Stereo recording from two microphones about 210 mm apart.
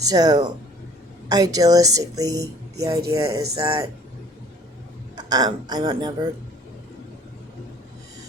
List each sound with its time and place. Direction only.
0.0 s a woman's voice: 20° right (ahead or behind)
5.1 s speech: 20° right (ahead or behind)